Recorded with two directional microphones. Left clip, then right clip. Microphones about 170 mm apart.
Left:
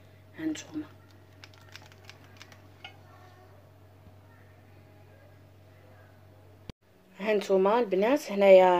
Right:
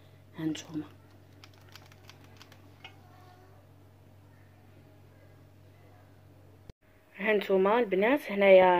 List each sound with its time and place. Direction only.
0.4 s speech: 40° right (ahead or behind)
7.2 s speech: 10° left (ahead or behind)